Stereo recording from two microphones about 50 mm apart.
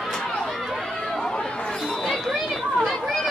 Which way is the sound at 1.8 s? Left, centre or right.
Centre.